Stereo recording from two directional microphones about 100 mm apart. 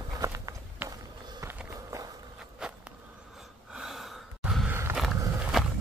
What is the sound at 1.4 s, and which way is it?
Walk, 35° right (ahead or behind).